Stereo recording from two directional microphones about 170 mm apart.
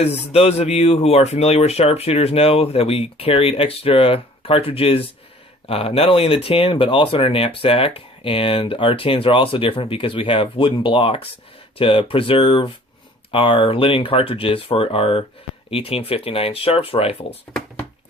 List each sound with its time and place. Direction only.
0.0 s speech: 40° left (ahead or behind)